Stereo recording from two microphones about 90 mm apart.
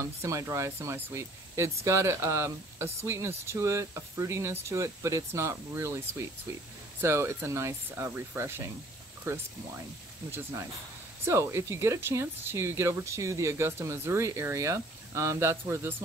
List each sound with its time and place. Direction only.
0.0 s speech: 35° right (ahead or behind)
11.2 s speech: 30° right (ahead or behind)